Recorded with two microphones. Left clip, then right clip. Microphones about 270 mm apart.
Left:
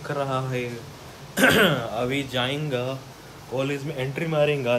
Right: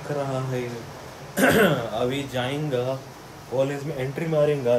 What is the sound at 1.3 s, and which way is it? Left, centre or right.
Speech, centre.